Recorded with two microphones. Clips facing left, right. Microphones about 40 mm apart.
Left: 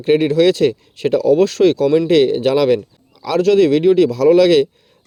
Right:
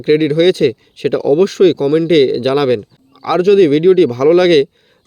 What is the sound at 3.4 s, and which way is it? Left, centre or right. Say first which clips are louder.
Speech: right 3 dB; centre.